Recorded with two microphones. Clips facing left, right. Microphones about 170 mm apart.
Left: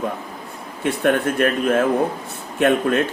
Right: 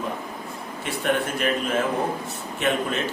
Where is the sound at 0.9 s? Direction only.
55° left (ahead or behind).